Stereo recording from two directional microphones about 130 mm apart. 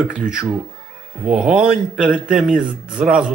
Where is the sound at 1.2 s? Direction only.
5° right (ahead or behind).